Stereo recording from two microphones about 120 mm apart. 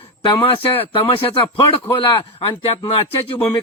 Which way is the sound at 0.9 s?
50° left (ahead or behind).